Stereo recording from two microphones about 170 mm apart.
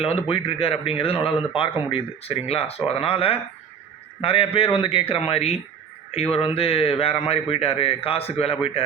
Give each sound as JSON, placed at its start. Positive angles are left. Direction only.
{"t": 0.0, "sound": "speech", "side_deg": 35}